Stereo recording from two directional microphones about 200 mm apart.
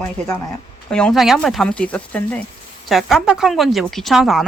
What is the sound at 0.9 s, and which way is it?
A woman's voice, 5° left (ahead or behind).